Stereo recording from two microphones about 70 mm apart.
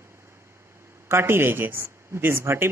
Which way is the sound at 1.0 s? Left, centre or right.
Right.